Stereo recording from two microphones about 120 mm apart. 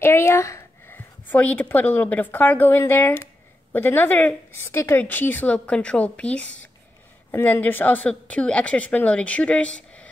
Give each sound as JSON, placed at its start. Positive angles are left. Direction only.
{"t": 0.0, "sound": "a woman's voice", "side_deg": 20}